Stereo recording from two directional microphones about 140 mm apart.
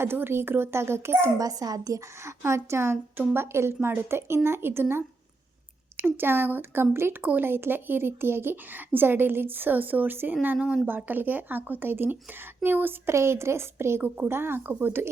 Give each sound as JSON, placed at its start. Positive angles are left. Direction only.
{"t": 0.0, "sound": "speech", "side_deg": -15}